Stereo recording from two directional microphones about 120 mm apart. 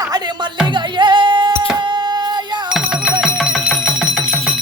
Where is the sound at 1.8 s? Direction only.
40° right (ahead or behind).